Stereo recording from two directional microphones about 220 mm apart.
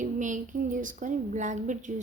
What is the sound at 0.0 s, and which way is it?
Speech, 35° right (ahead or behind).